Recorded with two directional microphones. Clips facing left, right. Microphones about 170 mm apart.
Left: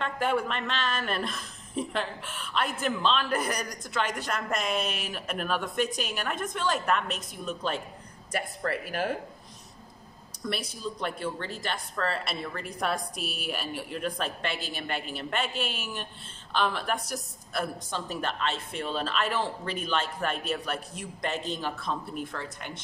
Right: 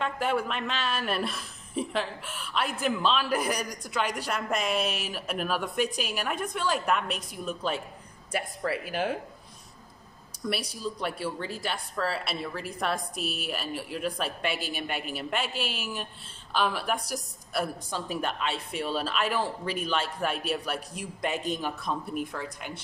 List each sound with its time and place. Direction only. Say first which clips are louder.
0.0 s a woman's voice: even; 5° right (ahead or behind)
10.4 s a woman's voice: right 1 dB; 5° right (ahead or behind)